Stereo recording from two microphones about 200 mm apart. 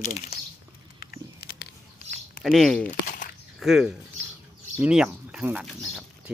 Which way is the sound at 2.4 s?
Centre (ahead or behind).